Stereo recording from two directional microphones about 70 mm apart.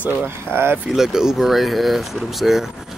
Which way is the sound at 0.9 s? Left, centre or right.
Centre.